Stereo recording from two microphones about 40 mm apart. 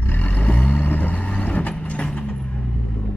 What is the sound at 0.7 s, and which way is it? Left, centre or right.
Vehicle, left.